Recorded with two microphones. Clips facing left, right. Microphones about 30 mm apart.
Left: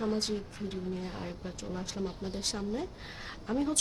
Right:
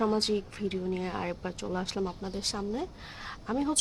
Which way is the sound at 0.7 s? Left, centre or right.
Right.